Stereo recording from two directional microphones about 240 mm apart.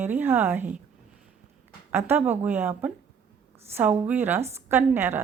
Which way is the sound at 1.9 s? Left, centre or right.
Centre.